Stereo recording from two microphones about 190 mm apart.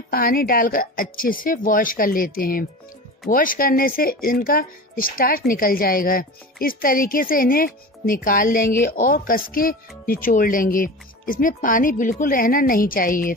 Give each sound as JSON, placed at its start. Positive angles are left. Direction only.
{"t": 0.1, "sound": "speech", "side_deg": 50}